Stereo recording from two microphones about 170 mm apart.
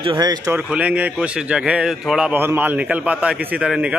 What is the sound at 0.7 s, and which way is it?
A man's voice, 10° right (ahead or behind).